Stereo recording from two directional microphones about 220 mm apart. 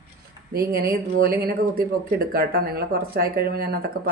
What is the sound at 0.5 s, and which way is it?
Speech, 45° right (ahead or behind).